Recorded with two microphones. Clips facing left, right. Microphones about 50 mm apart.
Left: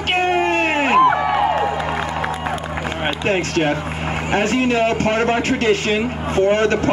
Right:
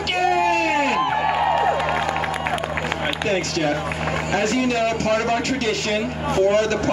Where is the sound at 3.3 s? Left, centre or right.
Left.